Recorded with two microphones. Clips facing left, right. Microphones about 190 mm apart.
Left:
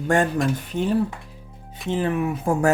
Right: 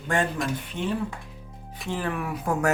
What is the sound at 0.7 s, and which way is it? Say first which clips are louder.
Speech: left 6 dB; 40° left (ahead or behind).